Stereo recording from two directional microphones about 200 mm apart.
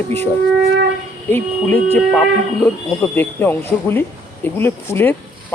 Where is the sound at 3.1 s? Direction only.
10° left (ahead or behind).